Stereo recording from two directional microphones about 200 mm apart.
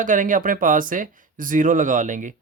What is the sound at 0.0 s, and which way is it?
Speech, 40° right (ahead or behind).